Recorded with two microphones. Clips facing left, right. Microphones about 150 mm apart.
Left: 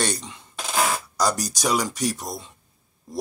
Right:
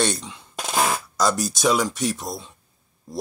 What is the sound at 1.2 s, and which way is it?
Speech, 15° left (ahead or behind).